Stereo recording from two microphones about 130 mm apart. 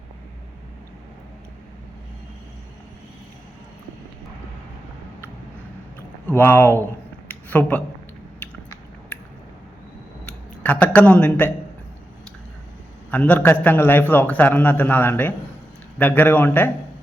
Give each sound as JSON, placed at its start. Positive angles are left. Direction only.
{"t": 6.2, "sound": "speech", "side_deg": 15}
{"t": 7.3, "sound": "a sound", "side_deg": 10}
{"t": 10.2, "sound": "speech", "side_deg": 10}
{"t": 13.1, "sound": "a man's voice", "side_deg": 10}